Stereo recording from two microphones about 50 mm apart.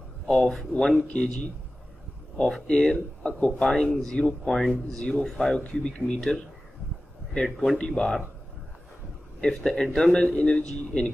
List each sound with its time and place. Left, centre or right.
0.3 s a man's voice: centre
2.3 s a man's voice: centre
7.4 s a man's voice: centre
9.7 s a man's voice: centre